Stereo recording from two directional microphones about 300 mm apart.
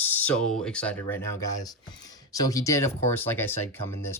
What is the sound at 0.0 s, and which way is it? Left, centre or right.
Speech, centre.